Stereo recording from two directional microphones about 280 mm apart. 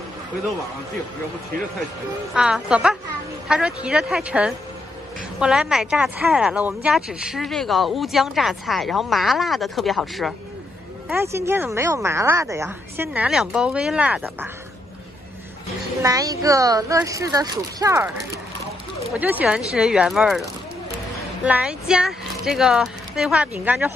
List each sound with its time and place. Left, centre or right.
2.3 s speech: centre
16.0 s speech: centre
21.5 s speech: centre